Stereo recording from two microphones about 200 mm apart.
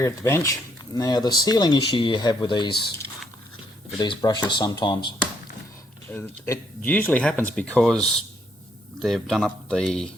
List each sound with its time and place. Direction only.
0.0 s speech: 15° left (ahead or behind)
3.9 s speech: 20° left (ahead or behind)
6.1 s speech: 10° left (ahead or behind)